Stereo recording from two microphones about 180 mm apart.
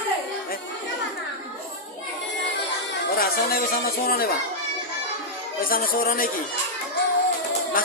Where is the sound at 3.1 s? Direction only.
55° left (ahead or behind).